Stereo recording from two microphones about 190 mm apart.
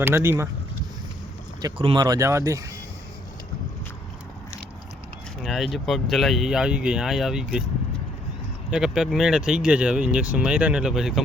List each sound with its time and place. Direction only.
0.0 s speech: 15° right (ahead or behind)
1.6 s speech: 25° right (ahead or behind)
5.4 s speech: centre (ahead or behind)
8.7 s speech: 5° right (ahead or behind)